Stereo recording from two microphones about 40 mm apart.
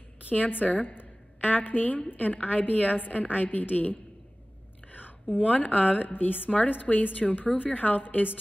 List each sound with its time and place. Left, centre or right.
0.3 s a woman's voice: left
4.9 s a sound: left
5.5 s a woman's voice: left